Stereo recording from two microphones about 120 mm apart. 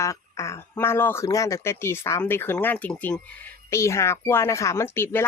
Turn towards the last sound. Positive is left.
turn(degrees=20)  # may be behind; listen again after turning